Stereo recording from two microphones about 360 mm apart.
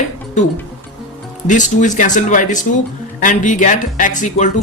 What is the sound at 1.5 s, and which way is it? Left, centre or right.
Speech, left.